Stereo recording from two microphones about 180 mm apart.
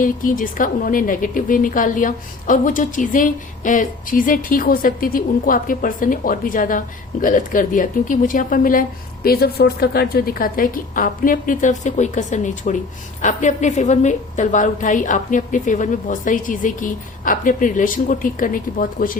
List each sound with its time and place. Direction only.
0.0 s a woman's voice: 50° left (ahead or behind)